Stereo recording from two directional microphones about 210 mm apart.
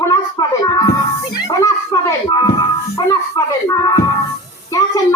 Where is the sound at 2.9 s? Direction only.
15° left (ahead or behind).